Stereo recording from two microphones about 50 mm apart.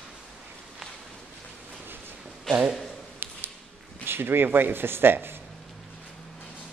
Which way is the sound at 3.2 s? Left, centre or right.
Right.